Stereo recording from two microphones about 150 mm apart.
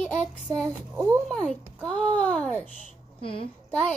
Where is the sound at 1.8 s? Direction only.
5° left (ahead or behind).